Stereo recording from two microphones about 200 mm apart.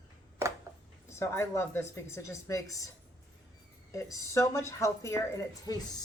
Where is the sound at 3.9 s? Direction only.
15° left (ahead or behind).